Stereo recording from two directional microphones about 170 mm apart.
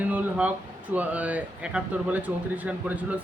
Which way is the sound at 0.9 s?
10° right (ahead or behind).